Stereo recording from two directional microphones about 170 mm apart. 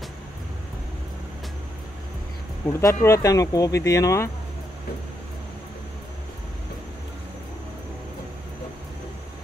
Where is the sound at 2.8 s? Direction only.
20° left (ahead or behind).